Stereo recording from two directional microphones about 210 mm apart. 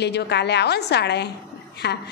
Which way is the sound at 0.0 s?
55° left (ahead or behind).